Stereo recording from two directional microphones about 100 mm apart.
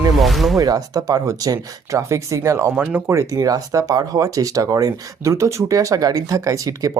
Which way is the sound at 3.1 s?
30° right (ahead or behind).